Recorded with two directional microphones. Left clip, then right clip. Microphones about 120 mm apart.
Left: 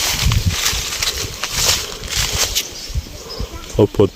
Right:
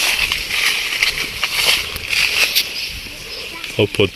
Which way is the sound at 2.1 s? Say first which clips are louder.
Right 5 dB; 20° left (ahead or behind).